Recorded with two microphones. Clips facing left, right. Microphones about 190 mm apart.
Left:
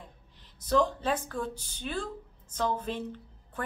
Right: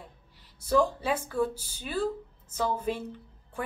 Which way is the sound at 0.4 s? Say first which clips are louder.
Right 1 dB; 10° right (ahead or behind).